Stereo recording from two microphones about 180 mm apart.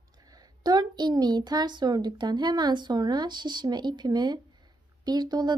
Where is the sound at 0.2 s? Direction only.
20° right (ahead or behind).